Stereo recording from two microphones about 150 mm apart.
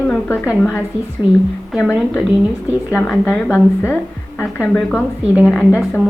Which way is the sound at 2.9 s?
15° left (ahead or behind).